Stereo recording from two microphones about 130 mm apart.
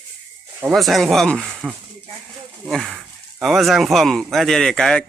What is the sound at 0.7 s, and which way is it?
Speech, centre (ahead or behind).